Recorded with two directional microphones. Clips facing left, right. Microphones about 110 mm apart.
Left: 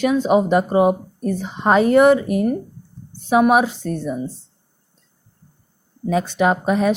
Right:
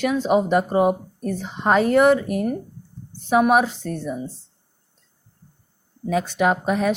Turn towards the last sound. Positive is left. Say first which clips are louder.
# left 3 dB
turn(degrees=25)  # may be behind; listen again after turning